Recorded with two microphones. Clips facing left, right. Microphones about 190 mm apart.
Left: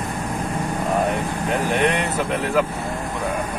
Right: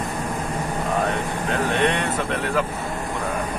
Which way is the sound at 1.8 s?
10° left (ahead or behind).